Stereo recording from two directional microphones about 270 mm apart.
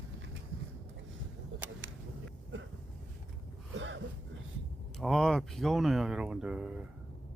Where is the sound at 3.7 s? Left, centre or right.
Right.